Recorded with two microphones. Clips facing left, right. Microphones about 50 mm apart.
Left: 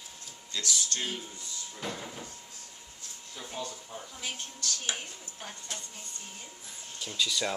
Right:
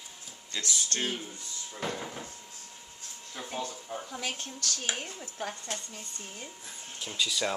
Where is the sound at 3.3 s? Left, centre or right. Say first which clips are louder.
Right 3 dB; right.